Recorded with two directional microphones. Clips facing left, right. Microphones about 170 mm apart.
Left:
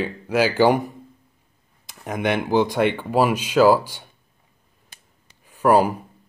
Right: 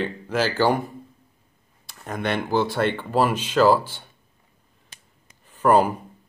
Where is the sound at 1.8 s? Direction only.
15° left (ahead or behind).